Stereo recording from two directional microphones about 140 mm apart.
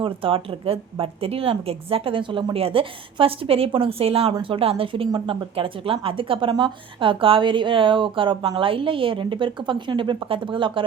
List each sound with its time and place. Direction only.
0.0 s speech: 40° right (ahead or behind)